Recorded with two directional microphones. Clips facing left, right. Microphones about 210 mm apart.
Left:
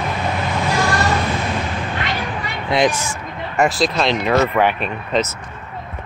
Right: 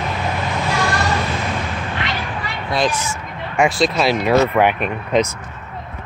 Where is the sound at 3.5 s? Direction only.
Centre (ahead or behind).